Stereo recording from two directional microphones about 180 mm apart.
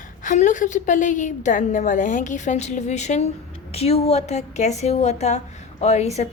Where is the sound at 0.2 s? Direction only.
45° left (ahead or behind).